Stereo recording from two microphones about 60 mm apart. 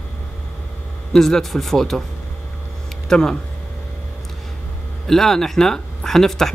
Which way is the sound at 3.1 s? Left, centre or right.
Centre.